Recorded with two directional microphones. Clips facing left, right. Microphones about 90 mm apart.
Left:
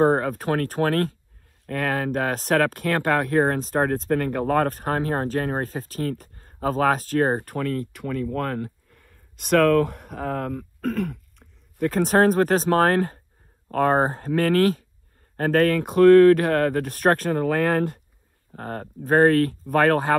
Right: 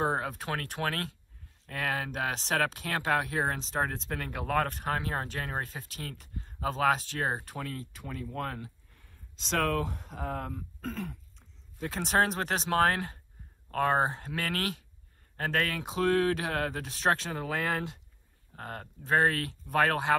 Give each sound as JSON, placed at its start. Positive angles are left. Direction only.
{"t": 0.0, "sound": "speech", "side_deg": 50}
{"t": 18.5, "sound": "speech", "side_deg": 40}